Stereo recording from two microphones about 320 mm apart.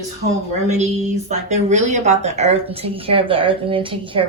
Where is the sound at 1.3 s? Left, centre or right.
Right.